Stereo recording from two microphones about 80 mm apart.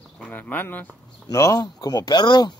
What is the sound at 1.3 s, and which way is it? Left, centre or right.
Speech, left.